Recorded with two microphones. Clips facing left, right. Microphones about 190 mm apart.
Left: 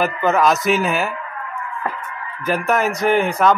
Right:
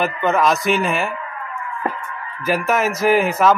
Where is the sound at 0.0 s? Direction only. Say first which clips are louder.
Left 1 dB; centre (ahead or behind).